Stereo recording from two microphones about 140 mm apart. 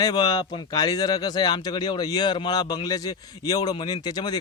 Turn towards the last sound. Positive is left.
turn(degrees=30)  # may be behind; listen again after turning